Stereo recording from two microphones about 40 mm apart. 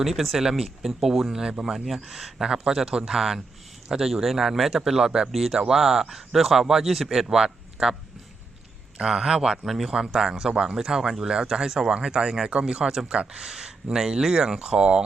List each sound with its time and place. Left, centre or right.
0.0 s a man's voice: centre; by 3.2 s right
3.2 s speech: centre
7.3 s speech: centre
9.0 s a man's voice: centre
9.6 s a man's voice: centre; by 15.0 s right